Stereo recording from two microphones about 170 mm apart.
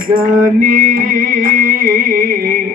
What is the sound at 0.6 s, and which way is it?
Music, 55° right (ahead or behind).